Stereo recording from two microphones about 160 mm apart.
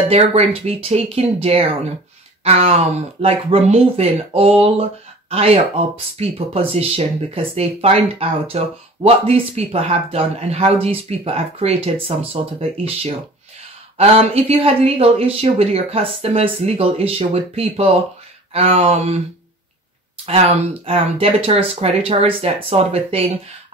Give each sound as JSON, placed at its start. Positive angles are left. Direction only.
{"t": 0.1, "sound": "speech", "side_deg": -40}
{"t": 20.2, "sound": "speech", "side_deg": -40}